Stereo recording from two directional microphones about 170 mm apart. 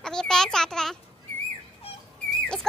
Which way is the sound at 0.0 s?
5° left (ahead or behind).